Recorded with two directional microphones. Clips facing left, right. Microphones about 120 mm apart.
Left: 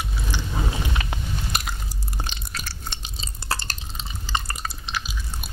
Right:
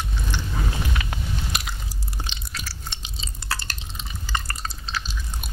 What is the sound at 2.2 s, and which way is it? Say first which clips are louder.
Drip: left 2 dB; 45° left (ahead or behind).